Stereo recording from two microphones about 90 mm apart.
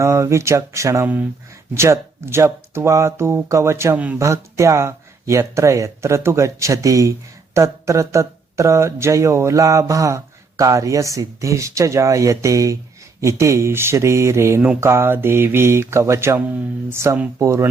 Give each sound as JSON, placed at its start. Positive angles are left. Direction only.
{"t": 0.0, "sound": "speech", "side_deg": -30}
{"t": 1.0, "sound": "mantra", "side_deg": -20}
{"t": 1.7, "sound": "speech", "side_deg": -30}
{"t": 3.9, "sound": "speech", "side_deg": -15}
{"t": 4.2, "sound": "speech", "side_deg": -35}
{"t": 14.8, "sound": "mantra", "side_deg": -30}
{"t": 16.9, "sound": "speech", "side_deg": -30}